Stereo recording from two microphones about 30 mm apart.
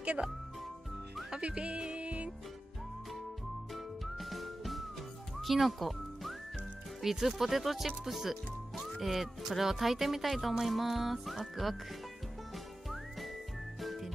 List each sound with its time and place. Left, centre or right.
0.0 s speech: right
1.4 s music: right
3.7 s music: centre
7.0 s speech: centre
10.6 s music: centre
13.7 s whistling: centre